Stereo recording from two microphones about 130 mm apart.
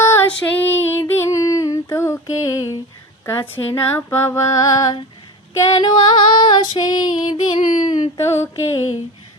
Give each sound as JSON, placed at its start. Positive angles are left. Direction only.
{"t": 0.0, "sound": "female singing", "side_deg": 20}